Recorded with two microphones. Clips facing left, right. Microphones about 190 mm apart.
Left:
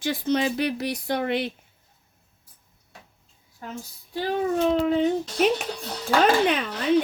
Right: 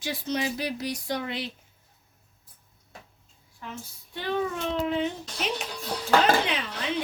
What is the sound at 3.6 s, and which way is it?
A child's voice, 45° left (ahead or behind).